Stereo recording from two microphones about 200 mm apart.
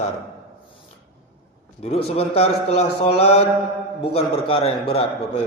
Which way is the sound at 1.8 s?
30° left (ahead or behind).